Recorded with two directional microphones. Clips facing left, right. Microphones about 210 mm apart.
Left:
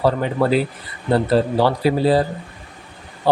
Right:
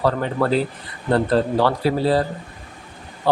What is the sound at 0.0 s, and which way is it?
Speech, 10° left (ahead or behind).